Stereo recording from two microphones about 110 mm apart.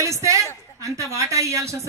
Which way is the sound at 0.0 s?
30° right (ahead or behind).